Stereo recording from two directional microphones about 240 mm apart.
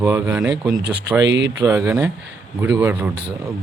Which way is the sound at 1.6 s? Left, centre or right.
Centre.